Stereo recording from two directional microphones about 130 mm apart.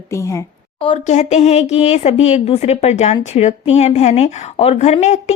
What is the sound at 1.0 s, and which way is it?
A woman's voice, 60° left (ahead or behind).